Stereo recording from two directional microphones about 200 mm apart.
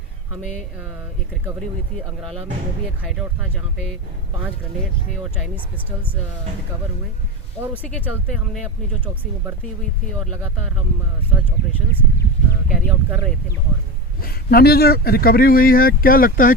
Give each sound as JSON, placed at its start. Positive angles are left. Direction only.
{"t": 3.0, "sound": "speech", "side_deg": -5}
{"t": 7.8, "sound": "speech", "side_deg": 5}
{"t": 12.6, "sound": "speech", "side_deg": 0}
{"t": 14.2, "sound": "speech", "side_deg": 50}